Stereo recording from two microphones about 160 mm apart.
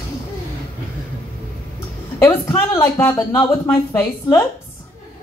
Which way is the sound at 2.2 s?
15° left (ahead or behind).